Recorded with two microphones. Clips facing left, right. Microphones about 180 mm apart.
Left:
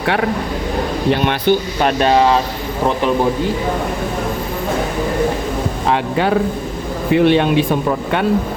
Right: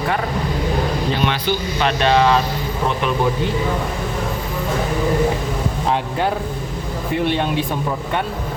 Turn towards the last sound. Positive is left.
turn(degrees=75)  # may be behind; listen again after turning